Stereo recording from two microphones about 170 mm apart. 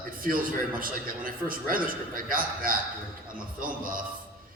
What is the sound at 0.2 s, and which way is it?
A man's voice, 55° right (ahead or behind).